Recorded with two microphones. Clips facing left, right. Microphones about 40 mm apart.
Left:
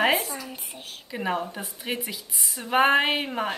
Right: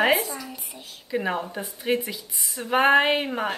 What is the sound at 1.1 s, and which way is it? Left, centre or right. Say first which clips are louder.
A woman's voice: right 2 dB; centre.